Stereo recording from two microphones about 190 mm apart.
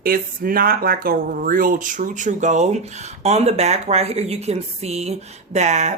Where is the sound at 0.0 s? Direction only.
50° right (ahead or behind).